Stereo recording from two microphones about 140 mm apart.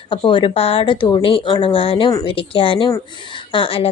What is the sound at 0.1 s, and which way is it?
Speech, 35° left (ahead or behind).